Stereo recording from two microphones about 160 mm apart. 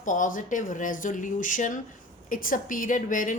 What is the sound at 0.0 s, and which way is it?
A woman's voice, 55° left (ahead or behind).